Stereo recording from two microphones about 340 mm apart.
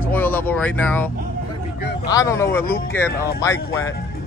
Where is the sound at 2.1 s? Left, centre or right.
Centre.